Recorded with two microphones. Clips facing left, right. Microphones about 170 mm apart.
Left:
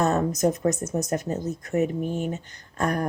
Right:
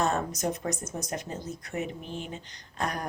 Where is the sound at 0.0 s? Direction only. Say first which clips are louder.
Left 6 dB; 40° left (ahead or behind).